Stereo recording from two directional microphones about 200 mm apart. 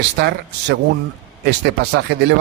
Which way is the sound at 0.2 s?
55° right (ahead or behind).